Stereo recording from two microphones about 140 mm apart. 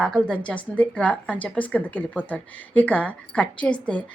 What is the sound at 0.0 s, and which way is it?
Speech, 5° left (ahead or behind).